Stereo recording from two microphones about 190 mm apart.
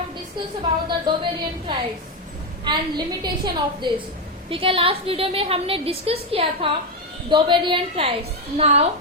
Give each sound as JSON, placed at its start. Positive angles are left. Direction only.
{"t": 0.6, "sound": "a woman's voice", "side_deg": -25}